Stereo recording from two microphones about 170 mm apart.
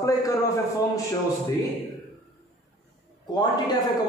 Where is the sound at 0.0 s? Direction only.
20° left (ahead or behind).